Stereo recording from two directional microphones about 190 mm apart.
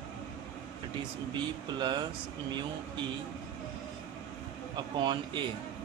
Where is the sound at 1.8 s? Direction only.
25° right (ahead or behind).